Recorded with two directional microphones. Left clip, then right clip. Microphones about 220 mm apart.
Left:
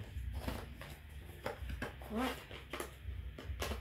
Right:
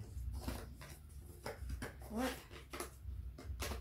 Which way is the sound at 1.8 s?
5° left (ahead or behind).